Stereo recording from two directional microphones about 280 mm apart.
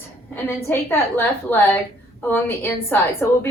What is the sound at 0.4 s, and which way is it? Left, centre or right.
A woman's voice, centre.